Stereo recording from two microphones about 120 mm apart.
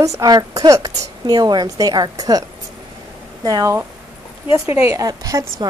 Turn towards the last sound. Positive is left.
turn(degrees=-30)  # may be behind; listen again after turning